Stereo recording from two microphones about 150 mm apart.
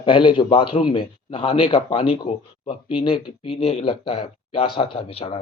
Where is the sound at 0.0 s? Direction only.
35° left (ahead or behind).